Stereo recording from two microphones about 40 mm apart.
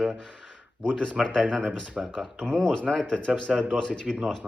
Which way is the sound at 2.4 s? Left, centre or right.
Left.